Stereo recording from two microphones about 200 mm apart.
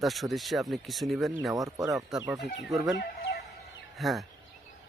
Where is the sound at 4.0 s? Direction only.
Centre (ahead or behind).